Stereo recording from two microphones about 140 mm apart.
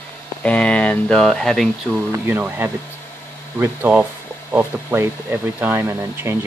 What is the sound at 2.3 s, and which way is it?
Speech, 15° right (ahead or behind).